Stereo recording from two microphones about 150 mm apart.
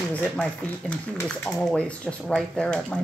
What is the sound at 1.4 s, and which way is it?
Speech, 5° left (ahead or behind).